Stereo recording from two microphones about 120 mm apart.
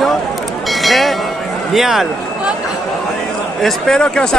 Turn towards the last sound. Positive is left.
turn(degrees=5)  # may be behind; listen again after turning